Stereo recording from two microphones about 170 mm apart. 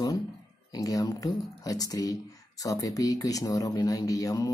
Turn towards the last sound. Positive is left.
turn(degrees=20)  # may be behind; listen again after turning